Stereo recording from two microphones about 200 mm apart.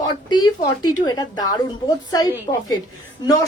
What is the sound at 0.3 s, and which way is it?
A woman's voice, 20° left (ahead or behind).